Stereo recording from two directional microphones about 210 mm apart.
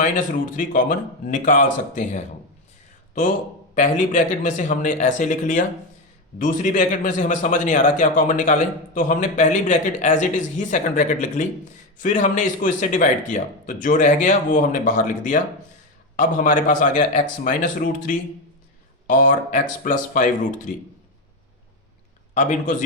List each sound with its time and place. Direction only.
0.5 s a man's voice: 40° left (ahead or behind)
3.8 s a man's voice: 35° left (ahead or behind)
22.4 s a man's voice: 35° left (ahead or behind)